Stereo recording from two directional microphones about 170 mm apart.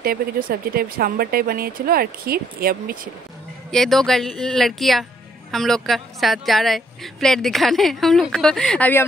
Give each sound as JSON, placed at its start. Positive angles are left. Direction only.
{"t": 0.0, "sound": "speech", "side_deg": -60}
{"t": 3.7, "sound": "speech", "side_deg": 0}